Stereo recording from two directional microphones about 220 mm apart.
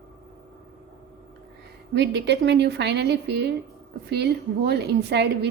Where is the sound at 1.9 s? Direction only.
50° right (ahead or behind).